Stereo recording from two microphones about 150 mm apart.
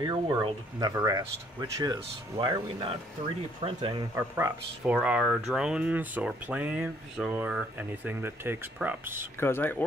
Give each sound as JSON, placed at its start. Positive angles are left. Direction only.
{"t": 0.0, "sound": "speech", "side_deg": -30}
{"t": 4.1, "sound": "speech", "side_deg": -20}
{"t": 4.9, "sound": "speech", "side_deg": -5}
{"t": 9.4, "sound": "speech", "side_deg": 15}